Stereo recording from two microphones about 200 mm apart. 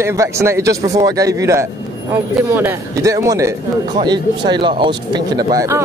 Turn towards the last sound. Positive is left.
turn(degrees=-15)  # may be behind; listen again after turning